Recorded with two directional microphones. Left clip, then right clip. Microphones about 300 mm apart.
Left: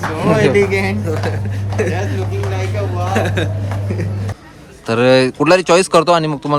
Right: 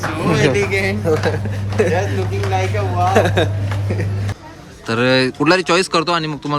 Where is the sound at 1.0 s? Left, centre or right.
Centre.